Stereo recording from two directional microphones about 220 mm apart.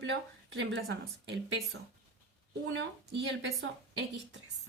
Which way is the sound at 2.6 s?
55° right (ahead or behind).